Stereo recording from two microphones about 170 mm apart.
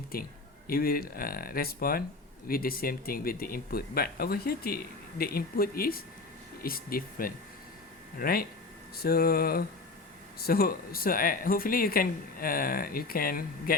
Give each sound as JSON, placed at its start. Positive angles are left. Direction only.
{"t": 0.1, "sound": "speech", "side_deg": 60}